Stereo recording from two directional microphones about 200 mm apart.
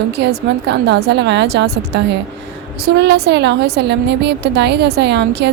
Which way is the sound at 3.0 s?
55° right (ahead or behind).